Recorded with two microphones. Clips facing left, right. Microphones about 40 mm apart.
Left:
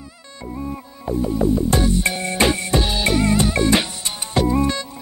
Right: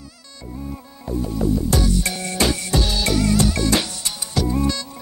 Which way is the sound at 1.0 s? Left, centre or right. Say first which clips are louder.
Left 3 dB; left.